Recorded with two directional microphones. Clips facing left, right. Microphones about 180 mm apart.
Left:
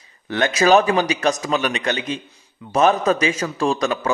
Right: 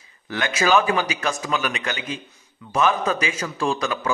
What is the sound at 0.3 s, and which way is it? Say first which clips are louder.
A man's voice: left 5 dB; 40° left (ahead or behind).